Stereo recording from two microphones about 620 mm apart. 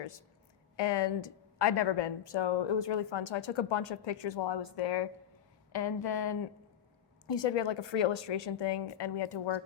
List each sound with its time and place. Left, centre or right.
0.8 s a woman's voice: left
7.4 s speech: left